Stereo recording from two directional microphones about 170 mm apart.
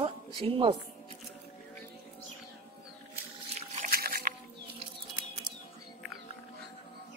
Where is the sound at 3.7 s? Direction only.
55° right (ahead or behind).